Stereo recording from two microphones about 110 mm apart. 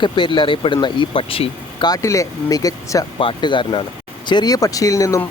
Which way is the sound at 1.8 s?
30° left (ahead or behind).